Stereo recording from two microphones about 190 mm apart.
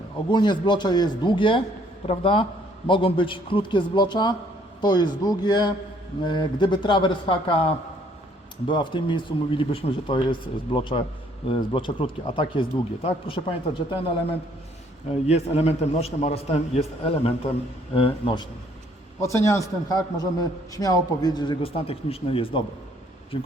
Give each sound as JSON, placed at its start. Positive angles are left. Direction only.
{"t": 0.3, "sound": "a man's voice", "side_deg": 25}
{"t": 15.3, "sound": "a man's voice", "side_deg": 35}
{"t": 19.2, "sound": "a man's voice", "side_deg": 15}